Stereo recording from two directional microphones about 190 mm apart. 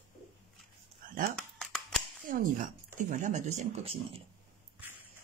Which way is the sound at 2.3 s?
45° right (ahead or behind).